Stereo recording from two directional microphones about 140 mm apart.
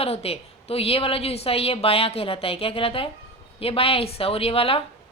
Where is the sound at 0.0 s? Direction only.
45° left (ahead or behind).